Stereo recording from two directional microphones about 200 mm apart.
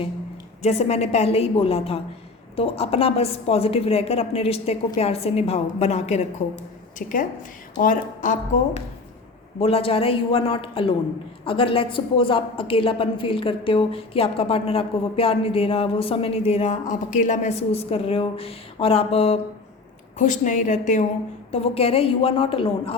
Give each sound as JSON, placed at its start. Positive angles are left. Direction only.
{"t": 0.6, "sound": "a woman's voice", "side_deg": 30}
{"t": 9.6, "sound": "a woman's voice", "side_deg": 30}